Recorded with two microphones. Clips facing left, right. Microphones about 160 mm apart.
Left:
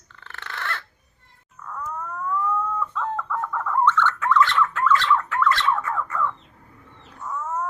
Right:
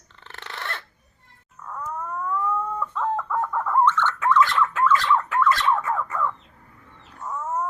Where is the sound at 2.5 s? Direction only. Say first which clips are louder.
Left 1 dB; 15° right (ahead or behind).